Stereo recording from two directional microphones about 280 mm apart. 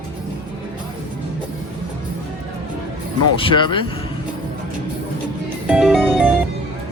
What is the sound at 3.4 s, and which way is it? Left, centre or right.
Speech, centre.